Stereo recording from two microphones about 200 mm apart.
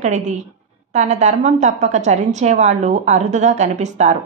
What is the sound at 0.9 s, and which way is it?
A woman's voice, 35° right (ahead or behind).